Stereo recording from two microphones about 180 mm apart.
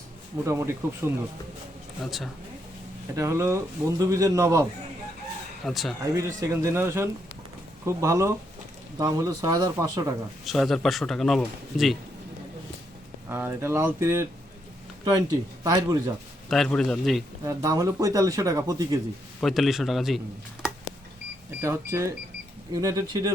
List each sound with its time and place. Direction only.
0.4 s a man's voice: 15° right (ahead or behind)
2.0 s speech: centre (ahead or behind)
3.2 s a man's voice: 15° right (ahead or behind)
5.6 s speech: centre (ahead or behind)
6.1 s a man's voice: 15° right (ahead or behind)
10.4 s speech: centre (ahead or behind)
13.2 s a man's voice: 15° right (ahead or behind)
16.5 s speech: centre (ahead or behind)
17.4 s speech: 20° right (ahead or behind)
19.4 s speech: centre (ahead or behind)
21.6 s a man's voice: 15° right (ahead or behind)